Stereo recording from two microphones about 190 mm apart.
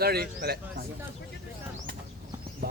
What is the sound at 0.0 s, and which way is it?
Speech, 55° right (ahead or behind).